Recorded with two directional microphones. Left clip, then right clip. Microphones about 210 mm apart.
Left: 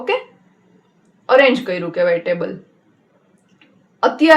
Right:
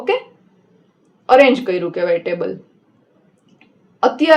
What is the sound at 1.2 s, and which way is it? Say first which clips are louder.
A woman's voice: right 2 dB; 45° right (ahead or behind).